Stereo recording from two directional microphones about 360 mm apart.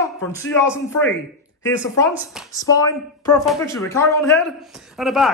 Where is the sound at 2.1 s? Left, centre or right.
Centre.